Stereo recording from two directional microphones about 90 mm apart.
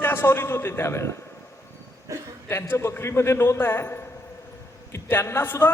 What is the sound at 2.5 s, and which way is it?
A man's voice, 30° left (ahead or behind).